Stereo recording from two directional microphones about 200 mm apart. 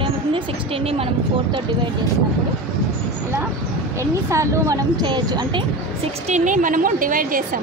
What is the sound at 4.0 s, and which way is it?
A woman's voice, 15° right (ahead or behind).